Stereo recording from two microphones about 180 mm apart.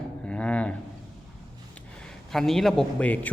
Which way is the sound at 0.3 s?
5° left (ahead or behind).